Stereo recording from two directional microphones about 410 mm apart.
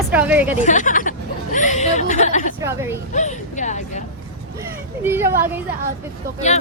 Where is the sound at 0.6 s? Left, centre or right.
Centre.